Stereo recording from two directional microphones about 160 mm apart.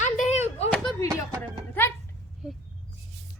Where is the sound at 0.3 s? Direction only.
40° left (ahead or behind).